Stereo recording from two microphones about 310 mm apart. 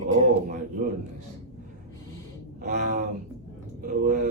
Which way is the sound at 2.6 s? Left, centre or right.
Right.